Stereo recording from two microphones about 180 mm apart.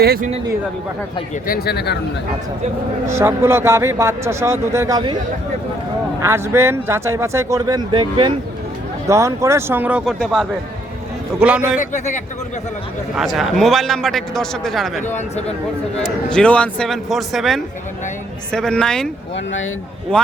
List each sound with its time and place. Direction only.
0.0 s speech: 60° right (ahead or behind)
1.5 s speech: 60° left (ahead or behind)
3.1 s speech: 15° right (ahead or behind)
6.1 s speech: 15° right (ahead or behind)
11.8 s a man's voice: 40° left (ahead or behind)
13.1 s a man's voice: centre (ahead or behind)
15.0 s speech: 40° left (ahead or behind)
16.0 s a man's voice: 5° left (ahead or behind)